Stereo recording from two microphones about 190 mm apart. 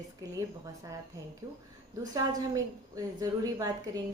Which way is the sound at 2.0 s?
20° right (ahead or behind).